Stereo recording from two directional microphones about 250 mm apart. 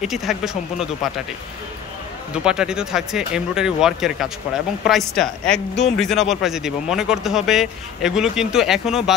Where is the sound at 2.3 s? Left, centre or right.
Centre.